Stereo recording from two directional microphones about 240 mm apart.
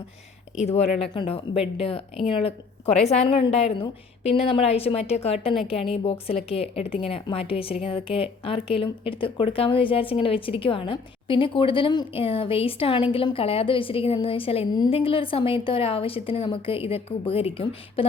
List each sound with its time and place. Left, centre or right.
0.6 s speech: left